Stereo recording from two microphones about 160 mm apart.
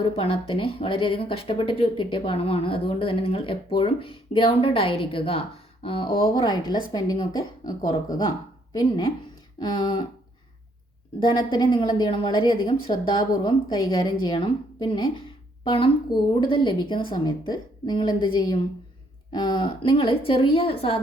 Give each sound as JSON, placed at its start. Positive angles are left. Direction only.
{"t": 0.0, "sound": "a woman's voice", "side_deg": 35}
{"t": 11.3, "sound": "a woman's voice", "side_deg": 30}